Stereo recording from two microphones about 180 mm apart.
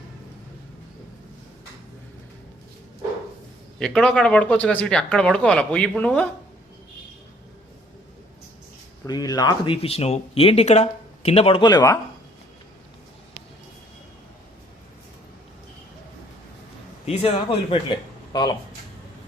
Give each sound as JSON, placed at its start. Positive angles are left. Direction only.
{"t": 3.8, "sound": "speech", "side_deg": 5}
{"t": 9.0, "sound": "speech", "side_deg": 20}
{"t": 17.1, "sound": "speech", "side_deg": 30}